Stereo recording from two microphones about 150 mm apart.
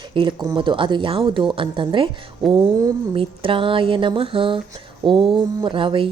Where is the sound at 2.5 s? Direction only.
25° right (ahead or behind).